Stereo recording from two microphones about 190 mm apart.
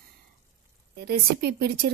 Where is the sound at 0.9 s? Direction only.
60° right (ahead or behind).